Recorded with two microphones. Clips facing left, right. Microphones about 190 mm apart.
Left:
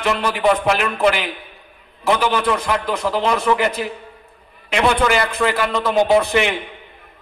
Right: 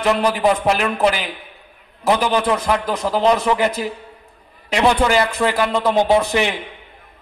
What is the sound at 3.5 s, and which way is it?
Speech, 20° right (ahead or behind).